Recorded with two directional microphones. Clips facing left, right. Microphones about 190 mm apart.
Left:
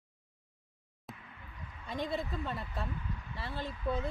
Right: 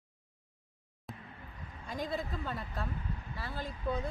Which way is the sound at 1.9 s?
Centre (ahead or behind).